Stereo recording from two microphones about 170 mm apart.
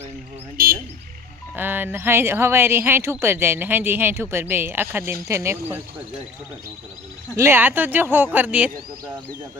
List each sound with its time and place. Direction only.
0.5 s frog: 60° right (ahead or behind)
1.5 s a woman's voice: 10° right (ahead or behind)
7.3 s a woman's voice: 15° right (ahead or behind)